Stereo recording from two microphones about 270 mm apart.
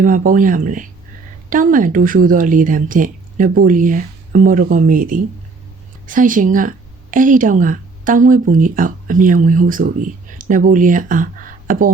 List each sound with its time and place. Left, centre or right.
0.0 s a woman's voice: right